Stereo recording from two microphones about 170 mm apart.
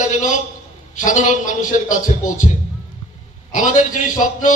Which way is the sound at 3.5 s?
50° left (ahead or behind).